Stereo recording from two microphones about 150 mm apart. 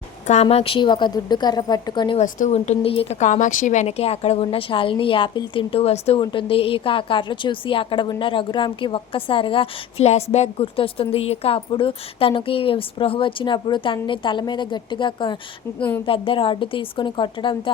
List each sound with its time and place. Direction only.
0.4 s a woman's voice: 40° left (ahead or behind)
2.2 s a woman's voice: 55° left (ahead or behind); by 17.6 s 35° left (ahead or behind)